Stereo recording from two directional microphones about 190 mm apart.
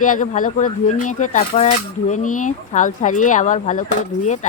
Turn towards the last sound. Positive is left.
turn(degrees=40)  # may be behind; listen again after turning